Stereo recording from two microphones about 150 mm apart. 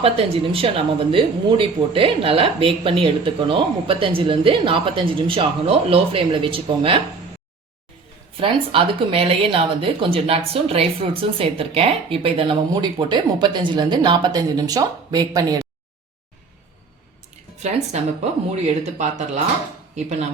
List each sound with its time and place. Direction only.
0.0 s speech: 40° right (ahead or behind)
8.4 s speech: 40° right (ahead or behind)
17.9 s speech: 50° right (ahead or behind)